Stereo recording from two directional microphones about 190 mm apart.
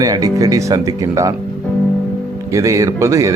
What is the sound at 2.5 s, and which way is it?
Speech, 15° right (ahead or behind).